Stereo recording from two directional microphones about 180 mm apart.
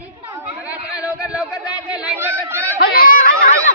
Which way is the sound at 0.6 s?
10° right (ahead or behind).